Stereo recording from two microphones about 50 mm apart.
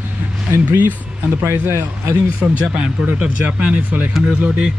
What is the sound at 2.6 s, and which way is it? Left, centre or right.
Speech, right.